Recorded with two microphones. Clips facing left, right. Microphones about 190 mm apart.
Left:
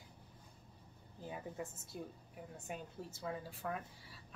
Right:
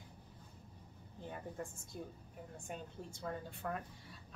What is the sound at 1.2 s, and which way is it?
A woman's voice, 5° left (ahead or behind).